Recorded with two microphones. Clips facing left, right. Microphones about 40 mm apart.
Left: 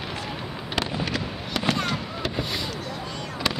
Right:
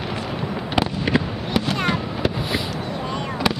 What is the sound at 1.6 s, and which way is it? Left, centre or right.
Fireworks, centre.